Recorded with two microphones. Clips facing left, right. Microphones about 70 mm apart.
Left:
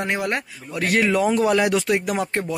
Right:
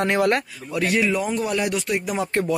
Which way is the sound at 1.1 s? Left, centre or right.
Left.